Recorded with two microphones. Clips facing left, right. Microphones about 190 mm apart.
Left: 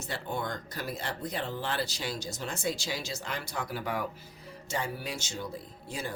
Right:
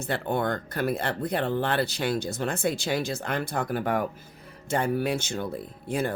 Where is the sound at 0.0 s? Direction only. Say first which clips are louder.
Right 8 dB; 60° right (ahead or behind).